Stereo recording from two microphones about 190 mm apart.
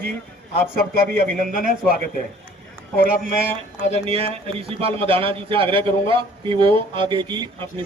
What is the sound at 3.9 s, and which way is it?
A man's voice, 30° right (ahead or behind).